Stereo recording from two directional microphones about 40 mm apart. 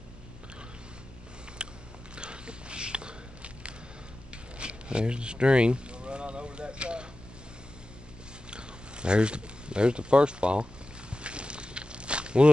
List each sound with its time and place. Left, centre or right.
1.6 s biting: right
2.1 s a sound: right
8.5 s biting: right